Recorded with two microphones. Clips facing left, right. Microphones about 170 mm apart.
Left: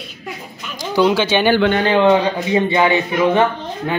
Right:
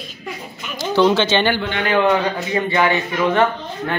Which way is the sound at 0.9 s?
10° left (ahead or behind).